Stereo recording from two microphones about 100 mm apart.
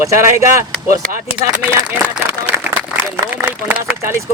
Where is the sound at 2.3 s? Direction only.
20° right (ahead or behind).